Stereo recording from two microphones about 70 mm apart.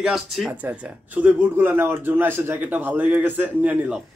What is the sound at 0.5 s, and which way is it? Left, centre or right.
Speech, right.